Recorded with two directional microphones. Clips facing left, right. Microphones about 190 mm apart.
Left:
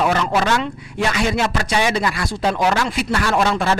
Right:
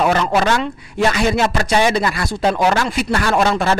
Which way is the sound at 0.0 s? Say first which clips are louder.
Right 2 dB; 45° right (ahead or behind).